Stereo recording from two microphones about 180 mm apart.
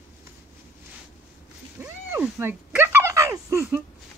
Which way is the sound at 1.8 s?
10° right (ahead or behind).